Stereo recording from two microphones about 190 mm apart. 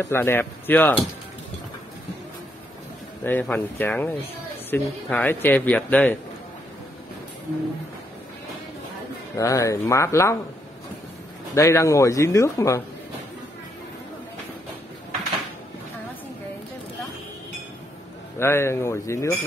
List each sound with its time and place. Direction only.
0.0 s a man's voice: 10° left (ahead or behind)
3.3 s a man's voice: 10° left (ahead or behind)
9.4 s a man's voice: 15° left (ahead or behind)
11.5 s a man's voice: 15° left (ahead or behind)
18.4 s a man's voice: 15° left (ahead or behind)